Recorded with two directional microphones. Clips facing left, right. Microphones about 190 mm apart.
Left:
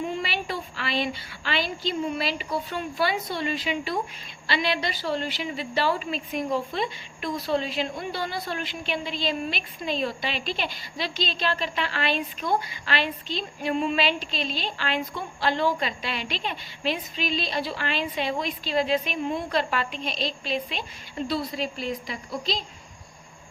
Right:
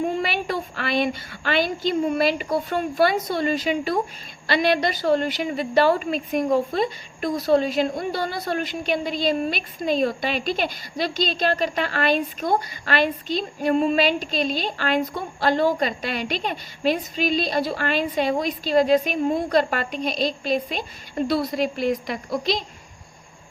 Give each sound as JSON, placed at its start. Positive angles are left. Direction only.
{"t": 0.0, "sound": "a woman's voice", "side_deg": -50}
{"t": 21.3, "sound": "a woman's voice", "side_deg": -70}